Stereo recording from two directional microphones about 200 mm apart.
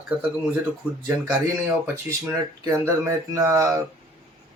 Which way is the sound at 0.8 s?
10° right (ahead or behind).